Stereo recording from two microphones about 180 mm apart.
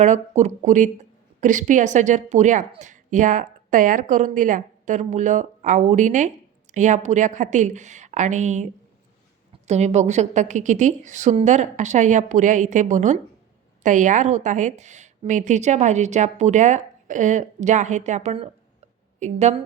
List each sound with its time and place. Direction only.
0.0 s speech: 40° right (ahead or behind)
9.6 s a woman's voice: 40° right (ahead or behind)